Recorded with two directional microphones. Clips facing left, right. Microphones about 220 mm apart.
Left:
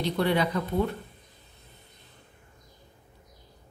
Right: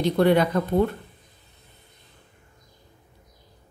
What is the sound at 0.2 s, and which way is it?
Speech, 50° right (ahead or behind).